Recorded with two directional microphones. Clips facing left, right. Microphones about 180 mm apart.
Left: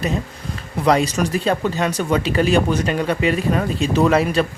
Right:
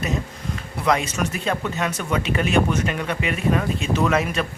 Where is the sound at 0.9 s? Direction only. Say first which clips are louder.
Left 5 dB; 35° left (ahead or behind).